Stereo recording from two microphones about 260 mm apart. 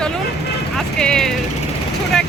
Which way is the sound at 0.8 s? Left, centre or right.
Centre.